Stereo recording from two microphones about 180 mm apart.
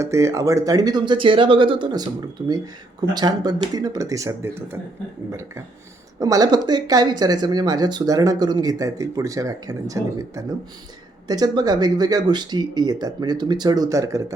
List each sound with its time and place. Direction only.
0.0 s speech: 15° right (ahead or behind)
6.1 s speech: 20° right (ahead or behind)